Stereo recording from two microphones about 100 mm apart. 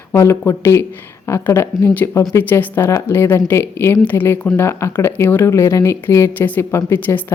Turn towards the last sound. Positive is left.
turn(degrees=25)  # may be behind; listen again after turning